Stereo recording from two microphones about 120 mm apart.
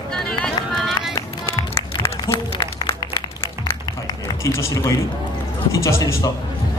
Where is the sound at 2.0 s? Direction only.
20° left (ahead or behind).